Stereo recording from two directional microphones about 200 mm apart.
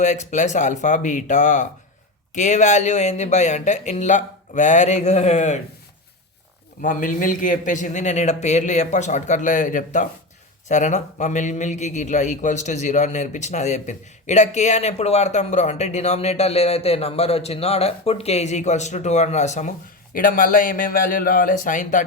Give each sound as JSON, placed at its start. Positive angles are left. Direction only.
{"t": 0.0, "sound": "a man's voice", "side_deg": 35}
{"t": 6.8, "sound": "a man's voice", "side_deg": 40}